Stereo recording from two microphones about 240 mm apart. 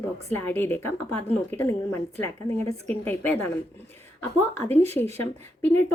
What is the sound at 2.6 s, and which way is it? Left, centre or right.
Speech, right.